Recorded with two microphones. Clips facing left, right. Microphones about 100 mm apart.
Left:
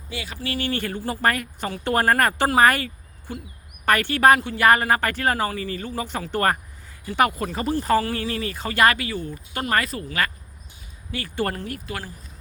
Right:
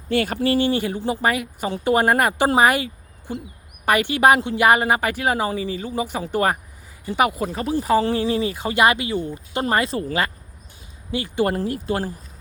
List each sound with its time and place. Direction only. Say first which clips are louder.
0.1 s speech: right 13 dB; 55° right (ahead or behind)
0.4 s speech: right 7 dB; 30° right (ahead or behind)
0.7 s speech: right 5 dB; 15° right (ahead or behind)
2.6 s a sound: left 2 dB; 15° right (ahead or behind)
3.8 s speech: right 1 dB; 15° right (ahead or behind)
11.5 s speech: right 8 dB; 30° right (ahead or behind)